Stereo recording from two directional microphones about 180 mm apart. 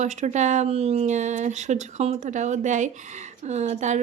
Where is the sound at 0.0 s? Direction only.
40° right (ahead or behind).